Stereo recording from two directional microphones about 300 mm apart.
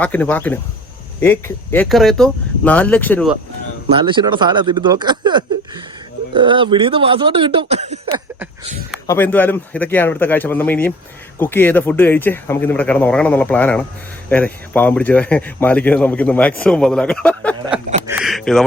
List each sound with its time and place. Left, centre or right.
0.0 s speech: centre
3.9 s speech: centre
9.0 s a man's voice: centre
18.0 s a sound: centre